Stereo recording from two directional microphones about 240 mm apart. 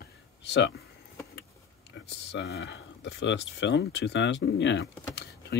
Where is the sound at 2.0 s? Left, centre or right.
Left.